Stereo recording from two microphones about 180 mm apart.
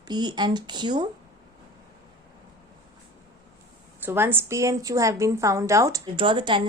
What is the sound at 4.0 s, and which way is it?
A woman's voice, 10° right (ahead or behind).